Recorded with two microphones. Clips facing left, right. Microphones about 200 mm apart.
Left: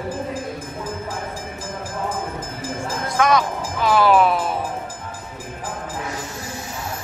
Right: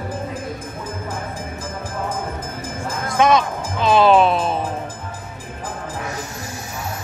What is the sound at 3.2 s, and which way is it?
Speech, 25° right (ahead or behind).